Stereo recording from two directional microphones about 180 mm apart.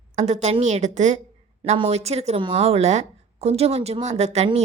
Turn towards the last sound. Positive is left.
turn(degrees=-35)  # may be behind; listen again after turning